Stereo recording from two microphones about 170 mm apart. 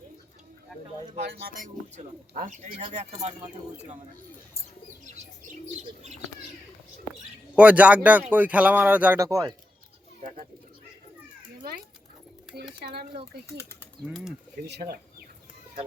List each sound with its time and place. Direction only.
1.1 s speech: 70° right (ahead or behind)
2.3 s speech: 45° right (ahead or behind)
5.7 s bird: 40° right (ahead or behind)
7.1 s bird: 5° right (ahead or behind)
8.3 s speech: 10° right (ahead or behind)
12.8 s speech: 75° right (ahead or behind)
14.1 s speech: centre (ahead or behind)
14.7 s speech: 70° right (ahead or behind)